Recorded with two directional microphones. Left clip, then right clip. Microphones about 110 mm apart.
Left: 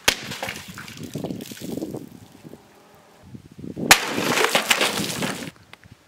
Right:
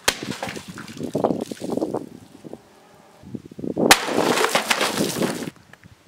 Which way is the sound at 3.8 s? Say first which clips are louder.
Right 1 dB; 5° right (ahead or behind).